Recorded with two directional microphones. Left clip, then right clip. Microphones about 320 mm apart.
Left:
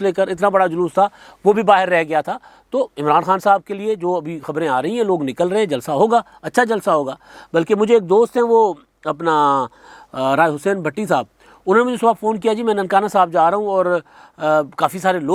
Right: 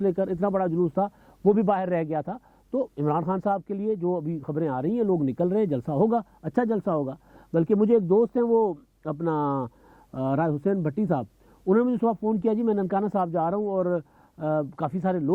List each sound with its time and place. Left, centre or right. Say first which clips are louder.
0.0 s a man's voice: left 9 dB; centre
8.4 s speech: left 9 dB; left
9.0 s a man's voice: left 12 dB; centre